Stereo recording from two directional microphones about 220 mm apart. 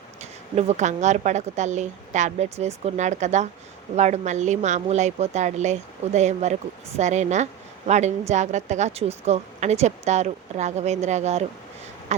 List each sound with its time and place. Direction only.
0.2 s a woman's voice: 30° right (ahead or behind)